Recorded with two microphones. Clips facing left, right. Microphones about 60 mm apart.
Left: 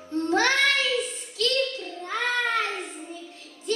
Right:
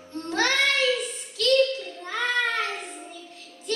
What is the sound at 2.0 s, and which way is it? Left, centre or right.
Child singing, left.